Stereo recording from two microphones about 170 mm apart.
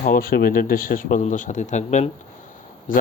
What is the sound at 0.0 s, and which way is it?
Speech, 60° left (ahead or behind).